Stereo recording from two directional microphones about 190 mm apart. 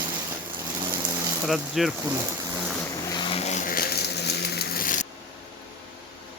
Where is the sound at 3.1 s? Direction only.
25° left (ahead or behind); by 5.0 s 45° left (ahead or behind).